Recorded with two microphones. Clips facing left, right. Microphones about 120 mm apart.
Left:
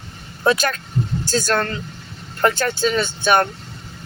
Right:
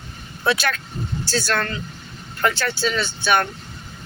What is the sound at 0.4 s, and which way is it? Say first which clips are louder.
Speech: left 3 dB; 45° left (ahead or behind).